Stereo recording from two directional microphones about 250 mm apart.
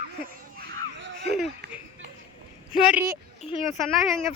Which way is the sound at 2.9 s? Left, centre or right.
Centre.